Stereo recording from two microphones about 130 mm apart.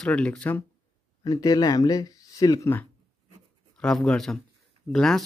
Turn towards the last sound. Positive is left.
turn(degrees=5)  # may be behind; listen again after turning